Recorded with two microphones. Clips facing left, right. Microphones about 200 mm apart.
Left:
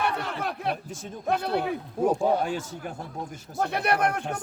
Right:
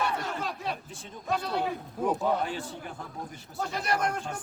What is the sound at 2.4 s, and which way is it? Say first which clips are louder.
Speech: left 4 dB; 45° left (ahead or behind).